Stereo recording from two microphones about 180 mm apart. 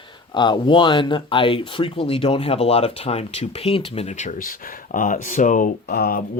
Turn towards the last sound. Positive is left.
turn(degrees=60)  # may be behind; listen again after turning